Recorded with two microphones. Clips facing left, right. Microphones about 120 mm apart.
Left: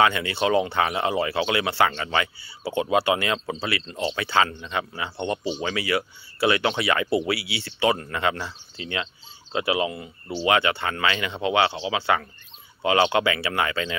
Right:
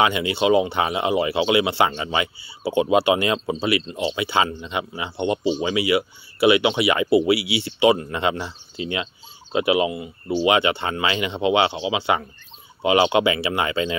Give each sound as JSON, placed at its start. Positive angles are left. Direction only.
{"t": 0.0, "sound": "speech", "side_deg": -20}